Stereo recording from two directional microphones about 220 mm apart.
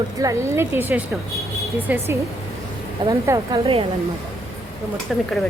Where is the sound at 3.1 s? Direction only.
15° right (ahead or behind).